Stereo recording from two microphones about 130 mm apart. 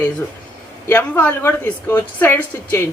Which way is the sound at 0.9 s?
15° left (ahead or behind).